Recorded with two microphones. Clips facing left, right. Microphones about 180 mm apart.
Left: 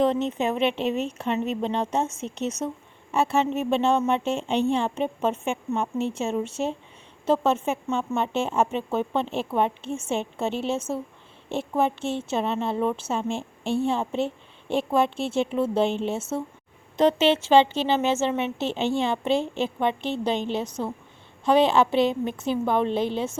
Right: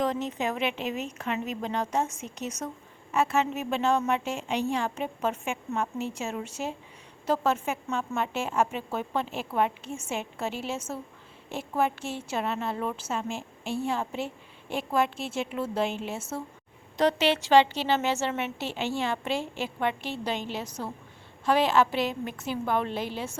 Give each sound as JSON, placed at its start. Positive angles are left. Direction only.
{"t": 0.0, "sound": "a woman's voice", "side_deg": 25}